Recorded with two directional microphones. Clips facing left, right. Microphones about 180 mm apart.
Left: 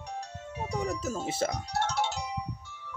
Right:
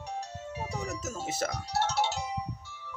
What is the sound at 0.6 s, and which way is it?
Speech, 30° left (ahead or behind).